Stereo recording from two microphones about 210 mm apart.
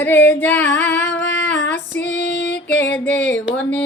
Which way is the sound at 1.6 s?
55° left (ahead or behind).